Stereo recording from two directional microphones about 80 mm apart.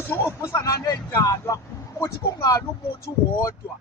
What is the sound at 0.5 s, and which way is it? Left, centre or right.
Speech, left.